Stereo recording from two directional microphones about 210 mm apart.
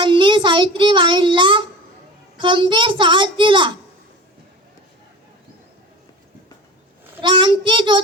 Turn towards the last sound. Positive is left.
turn(degrees=-25)  # may be behind; listen again after turning